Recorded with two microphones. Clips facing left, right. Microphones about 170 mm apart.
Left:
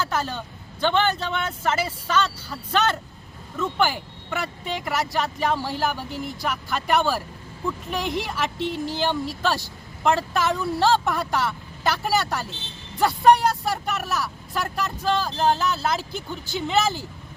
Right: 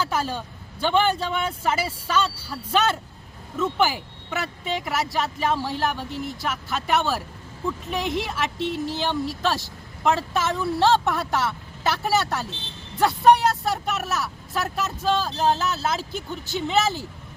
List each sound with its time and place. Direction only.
0.0 s speech: 10° right (ahead or behind)